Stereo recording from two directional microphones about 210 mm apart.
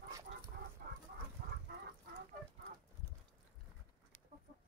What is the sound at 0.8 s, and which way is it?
Chicken, 45° right (ahead or behind).